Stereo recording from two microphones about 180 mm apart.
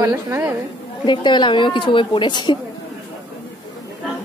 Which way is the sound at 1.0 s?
25° left (ahead or behind).